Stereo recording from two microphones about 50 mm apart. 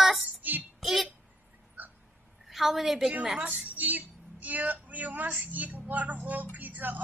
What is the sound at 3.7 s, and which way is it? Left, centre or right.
A woman's voice, right.